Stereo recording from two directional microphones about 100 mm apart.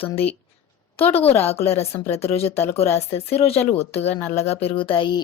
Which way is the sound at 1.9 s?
90° left.